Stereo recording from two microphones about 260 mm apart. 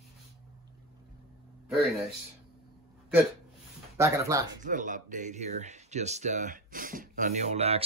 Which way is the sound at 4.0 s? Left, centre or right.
Centre.